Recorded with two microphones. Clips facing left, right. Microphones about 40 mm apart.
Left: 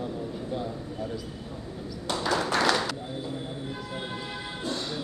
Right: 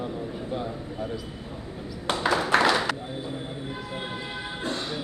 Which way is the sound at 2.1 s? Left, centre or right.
Right.